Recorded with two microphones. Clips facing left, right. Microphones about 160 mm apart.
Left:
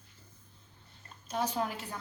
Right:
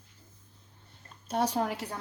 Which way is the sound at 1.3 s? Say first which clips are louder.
Right 4 dB; 70° right (ahead or behind).